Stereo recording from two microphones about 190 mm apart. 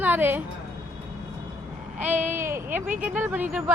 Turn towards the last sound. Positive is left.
turn(degrees=-5)  # may be behind; listen again after turning